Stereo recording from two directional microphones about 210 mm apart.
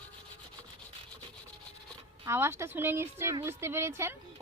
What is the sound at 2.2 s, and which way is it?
A woman's voice, 10° right (ahead or behind).